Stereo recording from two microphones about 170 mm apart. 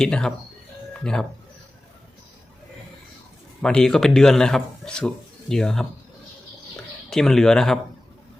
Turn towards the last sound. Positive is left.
turn(degrees=5)  # may be behind; listen again after turning